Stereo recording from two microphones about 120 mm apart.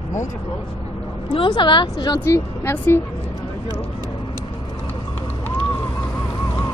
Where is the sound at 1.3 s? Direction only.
45° left (ahead or behind).